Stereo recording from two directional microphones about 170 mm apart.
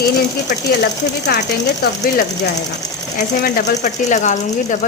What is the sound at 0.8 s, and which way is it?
Speech, 85° left.